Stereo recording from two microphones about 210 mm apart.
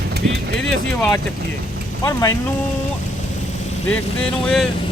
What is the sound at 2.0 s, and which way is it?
Speech, 15° left (ahead or behind).